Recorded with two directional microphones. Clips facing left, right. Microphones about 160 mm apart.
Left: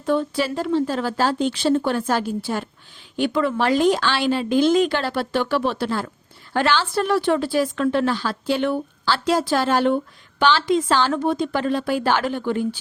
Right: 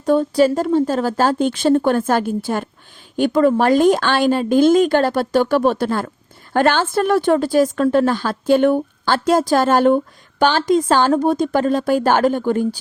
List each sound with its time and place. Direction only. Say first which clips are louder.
0.0 s speech: right 7 dB; 40° right (ahead or behind)